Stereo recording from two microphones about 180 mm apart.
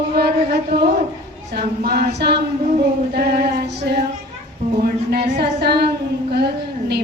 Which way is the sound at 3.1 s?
60° right (ahead or behind).